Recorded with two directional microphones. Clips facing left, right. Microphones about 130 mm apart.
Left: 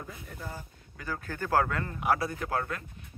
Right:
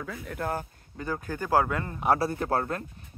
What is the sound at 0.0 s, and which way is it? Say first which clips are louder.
Speech: right 9 dB; 85° right.